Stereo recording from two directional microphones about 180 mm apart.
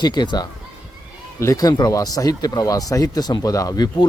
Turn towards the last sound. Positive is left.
turn(degrees=20)  # may be behind; listen again after turning